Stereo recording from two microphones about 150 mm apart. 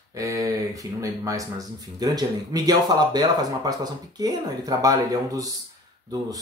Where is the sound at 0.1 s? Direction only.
20° right (ahead or behind).